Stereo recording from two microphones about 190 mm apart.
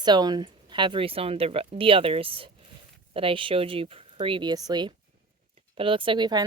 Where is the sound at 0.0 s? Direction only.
20° right (ahead or behind).